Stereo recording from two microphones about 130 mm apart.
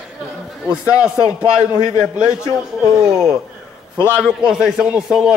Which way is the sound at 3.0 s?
5° right (ahead or behind).